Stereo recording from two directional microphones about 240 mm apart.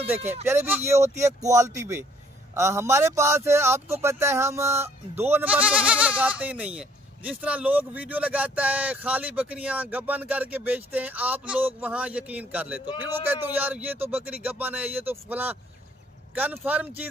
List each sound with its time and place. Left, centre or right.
0.2 s speech: right
0.5 s a man's voice: centre